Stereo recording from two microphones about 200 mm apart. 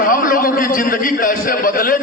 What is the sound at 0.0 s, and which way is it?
A man's voice, 45° left (ahead or behind).